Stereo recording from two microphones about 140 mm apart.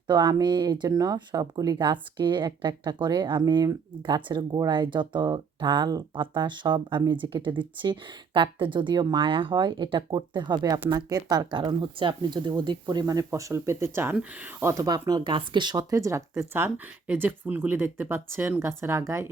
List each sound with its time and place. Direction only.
0.1 s speech: 30° right (ahead or behind)